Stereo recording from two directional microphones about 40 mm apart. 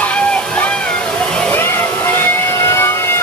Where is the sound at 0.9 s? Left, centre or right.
Left.